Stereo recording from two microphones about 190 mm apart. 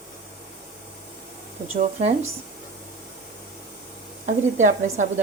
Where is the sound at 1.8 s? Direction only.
35° right (ahead or behind).